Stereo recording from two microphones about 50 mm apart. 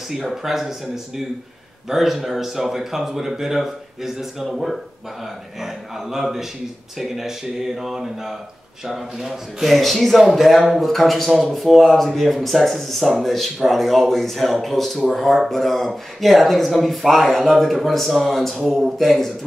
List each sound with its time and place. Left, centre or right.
0.1 s a man's voice: centre